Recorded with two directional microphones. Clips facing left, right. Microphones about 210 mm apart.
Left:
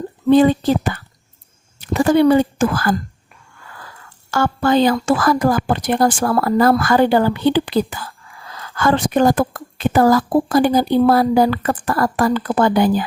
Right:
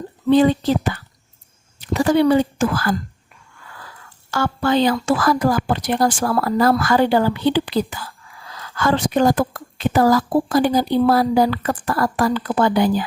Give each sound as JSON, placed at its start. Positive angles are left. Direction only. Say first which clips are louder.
{"t": 0.3, "sound": "a woman's voice", "louder": "left 2 dB", "side_deg": 50}
{"t": 4.3, "sound": "a woman's voice", "louder": "left 3 dB", "side_deg": 50}